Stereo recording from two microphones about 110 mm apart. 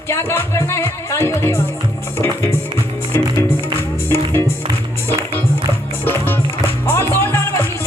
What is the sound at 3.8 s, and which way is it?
Music, 20° left (ahead or behind).